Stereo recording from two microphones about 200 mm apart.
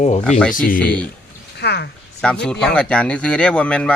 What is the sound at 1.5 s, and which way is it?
Speech, 55° left (ahead or behind).